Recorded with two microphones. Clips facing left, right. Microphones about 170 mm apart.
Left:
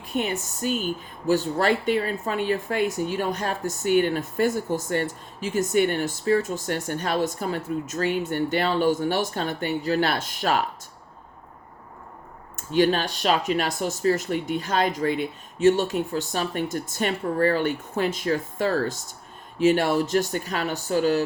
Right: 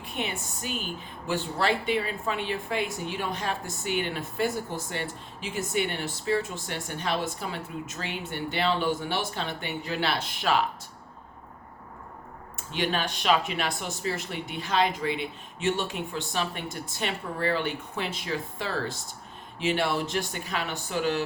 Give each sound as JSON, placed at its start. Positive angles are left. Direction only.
{"t": 0.0, "sound": "speech", "side_deg": 40}
{"t": 12.5, "sound": "speech", "side_deg": 40}